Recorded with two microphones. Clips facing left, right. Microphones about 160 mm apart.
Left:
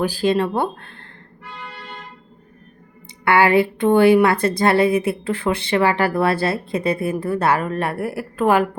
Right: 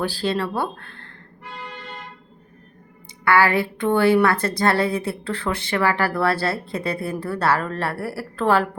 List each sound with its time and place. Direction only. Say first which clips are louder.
0.0 s speech: left 5 dB; 15° left (ahead or behind)
3.2 s a woman's voice: left 3 dB; 20° left (ahead or behind)